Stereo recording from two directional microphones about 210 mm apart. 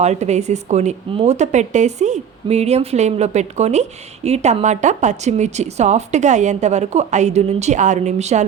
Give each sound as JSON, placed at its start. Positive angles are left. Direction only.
{"t": 0.0, "sound": "speech", "side_deg": -30}